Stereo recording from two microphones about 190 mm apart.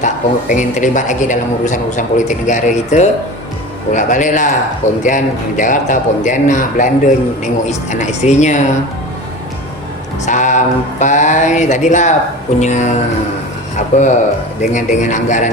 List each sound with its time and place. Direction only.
0.0 s a man's voice: 40° left (ahead or behind)
10.2 s a man's voice: 40° left (ahead or behind)